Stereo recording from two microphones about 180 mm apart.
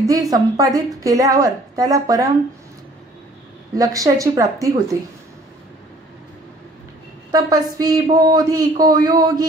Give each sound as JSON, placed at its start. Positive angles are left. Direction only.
{"t": 0.0, "sound": "speech", "side_deg": -20}
{"t": 3.7, "sound": "speech", "side_deg": -20}
{"t": 7.2, "sound": "speech", "side_deg": -20}